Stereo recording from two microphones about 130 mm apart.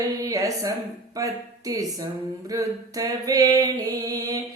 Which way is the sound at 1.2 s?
25° right (ahead or behind).